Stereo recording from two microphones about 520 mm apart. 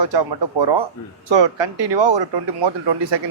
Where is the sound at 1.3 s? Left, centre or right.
Right.